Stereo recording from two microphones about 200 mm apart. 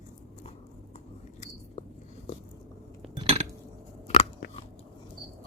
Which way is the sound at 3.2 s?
30° right (ahead or behind).